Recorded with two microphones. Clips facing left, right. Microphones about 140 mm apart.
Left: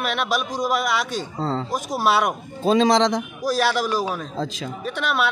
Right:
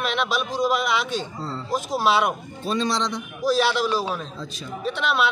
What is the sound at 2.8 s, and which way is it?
Speech, 90° left.